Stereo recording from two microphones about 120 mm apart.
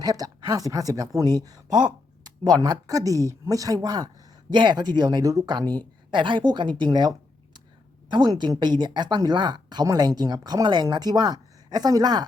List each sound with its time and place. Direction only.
0.0 s speech: 30° right (ahead or behind)
8.1 s speech: 40° right (ahead or behind)